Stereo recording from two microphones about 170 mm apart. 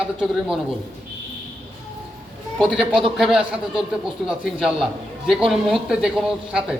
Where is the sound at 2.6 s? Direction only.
5° right (ahead or behind).